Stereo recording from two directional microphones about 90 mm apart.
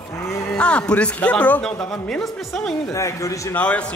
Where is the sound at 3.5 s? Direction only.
15° left (ahead or behind).